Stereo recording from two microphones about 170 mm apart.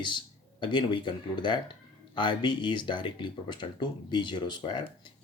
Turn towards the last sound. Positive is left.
turn(degrees=25)  # may be behind; listen again after turning